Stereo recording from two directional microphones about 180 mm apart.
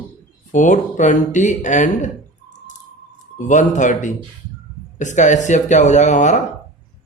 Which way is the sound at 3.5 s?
45° left (ahead or behind).